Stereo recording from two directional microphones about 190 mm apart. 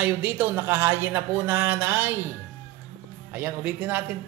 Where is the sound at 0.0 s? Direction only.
10° right (ahead or behind).